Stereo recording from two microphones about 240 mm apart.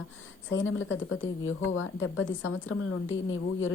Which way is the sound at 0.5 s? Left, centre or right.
Left.